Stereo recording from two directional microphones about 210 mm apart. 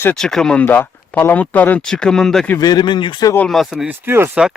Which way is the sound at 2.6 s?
20° left (ahead or behind).